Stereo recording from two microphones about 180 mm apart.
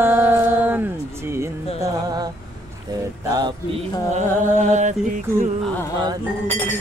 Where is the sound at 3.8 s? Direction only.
40° right (ahead or behind).